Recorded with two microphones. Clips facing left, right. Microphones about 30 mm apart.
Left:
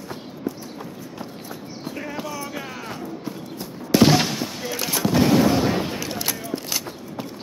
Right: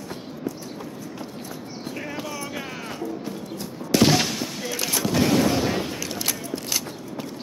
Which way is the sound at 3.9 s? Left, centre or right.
Left.